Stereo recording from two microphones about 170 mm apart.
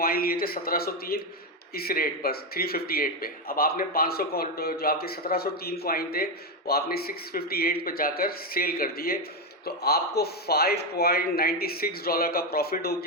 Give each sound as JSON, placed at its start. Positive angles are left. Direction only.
{"t": 0.0, "sound": "a man's voice", "side_deg": 60}